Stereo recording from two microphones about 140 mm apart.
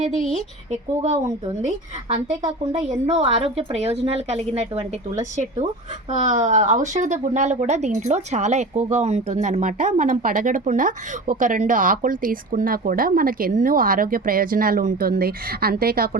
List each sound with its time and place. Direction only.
1.6 s a woman's voice: 55° right (ahead or behind); by 16.0 s 90° right